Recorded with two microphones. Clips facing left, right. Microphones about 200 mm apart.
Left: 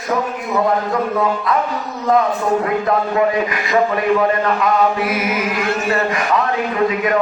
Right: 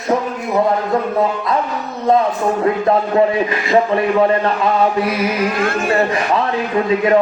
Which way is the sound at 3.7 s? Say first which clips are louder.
Right 1 dB; 30° right (ahead or behind).